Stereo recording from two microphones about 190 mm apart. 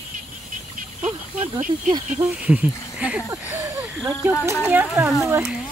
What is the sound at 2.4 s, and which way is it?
Speech, 5° right (ahead or behind).